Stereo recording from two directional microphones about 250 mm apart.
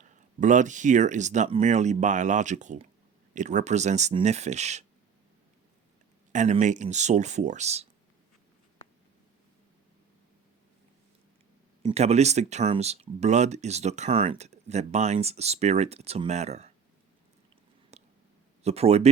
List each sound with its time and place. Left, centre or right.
0.0 s speech: right
6.3 s speech: right
11.8 s speech: right
17.9 s a sound: right
18.6 s speech: right